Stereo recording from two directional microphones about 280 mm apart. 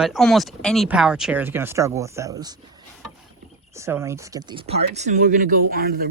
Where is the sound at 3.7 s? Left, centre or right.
Centre.